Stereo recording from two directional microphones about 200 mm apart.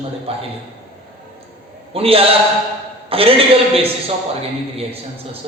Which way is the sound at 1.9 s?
30° right (ahead or behind).